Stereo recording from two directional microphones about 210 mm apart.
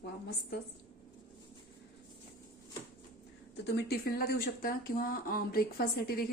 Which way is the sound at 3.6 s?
55° left (ahead or behind).